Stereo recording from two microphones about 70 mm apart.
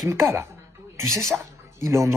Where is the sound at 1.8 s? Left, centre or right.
Right.